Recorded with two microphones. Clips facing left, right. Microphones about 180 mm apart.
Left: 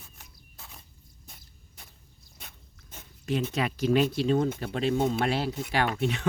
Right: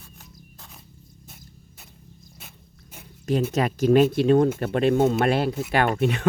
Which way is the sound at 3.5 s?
45° right (ahead or behind).